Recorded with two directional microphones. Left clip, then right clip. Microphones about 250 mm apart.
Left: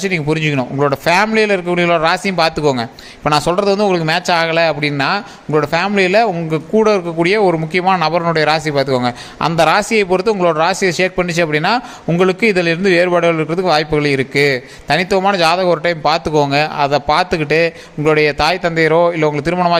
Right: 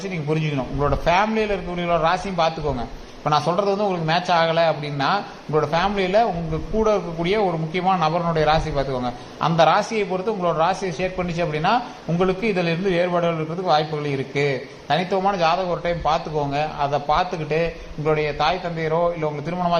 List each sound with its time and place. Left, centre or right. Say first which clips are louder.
0.0 s a man's voice: left 9 dB; left